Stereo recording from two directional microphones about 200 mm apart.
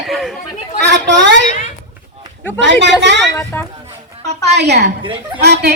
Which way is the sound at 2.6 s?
65° right (ahead or behind).